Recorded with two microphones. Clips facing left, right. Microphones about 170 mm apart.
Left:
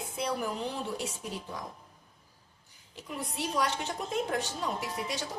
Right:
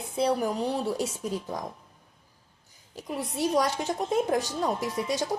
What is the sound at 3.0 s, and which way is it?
A woman's voice, 40° right (ahead or behind).